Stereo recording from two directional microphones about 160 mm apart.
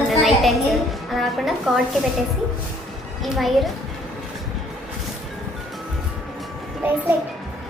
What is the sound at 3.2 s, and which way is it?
Speech, centre (ahead or behind).